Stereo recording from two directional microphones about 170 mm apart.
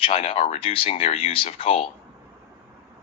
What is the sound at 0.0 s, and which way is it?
Speech, 35° left (ahead or behind).